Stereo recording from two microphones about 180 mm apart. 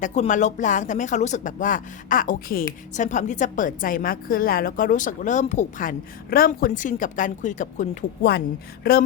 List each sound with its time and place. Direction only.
0.0 s a woman's voice: 45° left (ahead or behind)
8.3 s a woman's voice: 60° left (ahead or behind)